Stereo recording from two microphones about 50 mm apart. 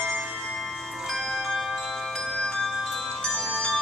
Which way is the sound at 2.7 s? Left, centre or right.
Centre.